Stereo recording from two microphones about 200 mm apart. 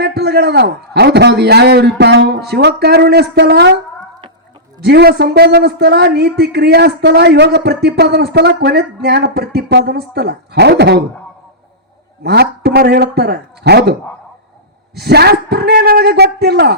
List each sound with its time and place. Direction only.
0.0 s a man's voice: 55° right (ahead or behind)
4.8 s a man's voice: 55° right (ahead or behind)
12.2 s a man's voice: 55° right (ahead or behind)
14.9 s a man's voice: 55° right (ahead or behind)